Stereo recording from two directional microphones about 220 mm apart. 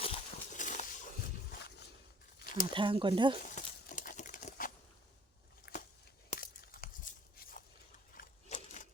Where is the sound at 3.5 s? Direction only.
35° left (ahead or behind).